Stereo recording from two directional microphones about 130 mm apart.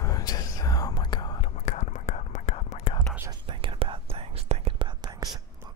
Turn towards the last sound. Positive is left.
turn(degrees=-45)  # may be behind; listen again after turning